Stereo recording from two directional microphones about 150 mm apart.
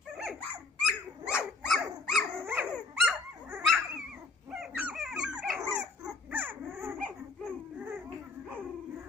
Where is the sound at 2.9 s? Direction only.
Centre (ahead or behind).